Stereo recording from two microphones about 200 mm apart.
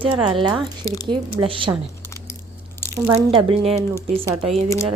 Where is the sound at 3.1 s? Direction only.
25° right (ahead or behind).